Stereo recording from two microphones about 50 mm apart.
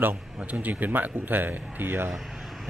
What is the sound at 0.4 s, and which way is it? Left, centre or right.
Speech, right.